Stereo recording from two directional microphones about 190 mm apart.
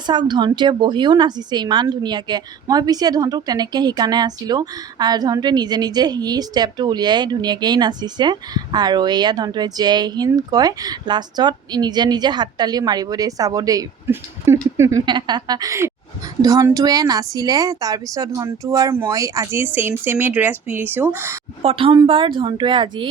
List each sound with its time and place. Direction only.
0.1 s a woman's voice: 25° right (ahead or behind)
21.6 s a woman's voice: 30° right (ahead or behind)